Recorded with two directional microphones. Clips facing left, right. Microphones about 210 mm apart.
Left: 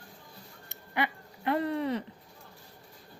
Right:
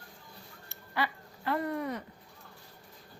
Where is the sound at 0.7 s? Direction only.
20° left (ahead or behind).